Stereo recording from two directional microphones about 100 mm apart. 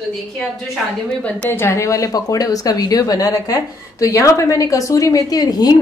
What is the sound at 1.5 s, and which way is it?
A woman's voice, 25° left (ahead or behind).